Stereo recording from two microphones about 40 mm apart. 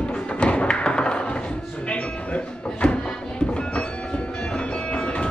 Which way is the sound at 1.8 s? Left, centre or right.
Left.